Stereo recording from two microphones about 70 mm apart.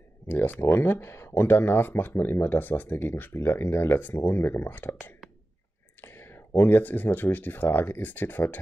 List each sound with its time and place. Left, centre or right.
0.3 s speech: left
5.9 s whispering: left
6.5 s speech: left